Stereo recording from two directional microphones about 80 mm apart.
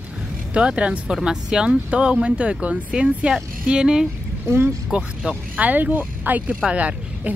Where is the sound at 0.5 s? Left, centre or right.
Centre.